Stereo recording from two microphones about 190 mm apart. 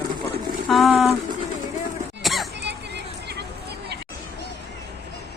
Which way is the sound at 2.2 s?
Centre (ahead or behind).